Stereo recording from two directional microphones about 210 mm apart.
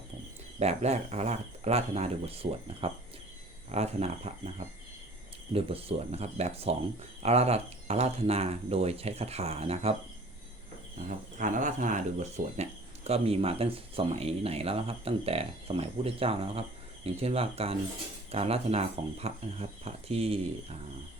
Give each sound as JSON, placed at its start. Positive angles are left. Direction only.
{"t": 0.6, "sound": "speech", "side_deg": -30}
{"t": 5.5, "sound": "speech", "side_deg": -25}
{"t": 11.3, "sound": "speech", "side_deg": -35}